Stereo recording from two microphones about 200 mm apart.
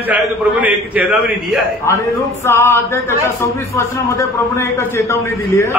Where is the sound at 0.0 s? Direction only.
10° right (ahead or behind).